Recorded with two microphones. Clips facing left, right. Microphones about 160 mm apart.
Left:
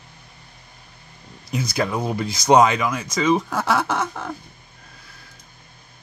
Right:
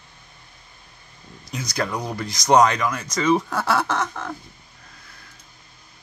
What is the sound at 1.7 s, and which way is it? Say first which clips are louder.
Speech: left 2 dB; 5° left (ahead or behind).